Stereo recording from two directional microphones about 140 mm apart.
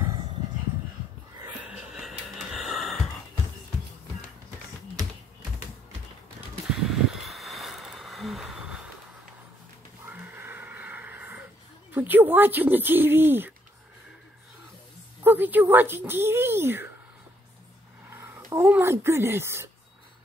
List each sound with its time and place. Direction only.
1.7 s a sound: 5° right (ahead or behind)
6.7 s a sound: 5° right (ahead or behind)
10.0 s wheeze: 15° right (ahead or behind)
11.9 s speech: 15° right (ahead or behind)
15.2 s speech: 15° right (ahead or behind)
18.1 s speech: 15° right (ahead or behind)